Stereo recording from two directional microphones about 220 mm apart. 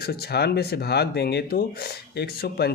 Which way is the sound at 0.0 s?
45° left (ahead or behind).